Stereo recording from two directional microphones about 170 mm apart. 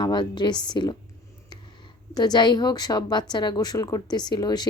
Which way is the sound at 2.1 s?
25° left (ahead or behind).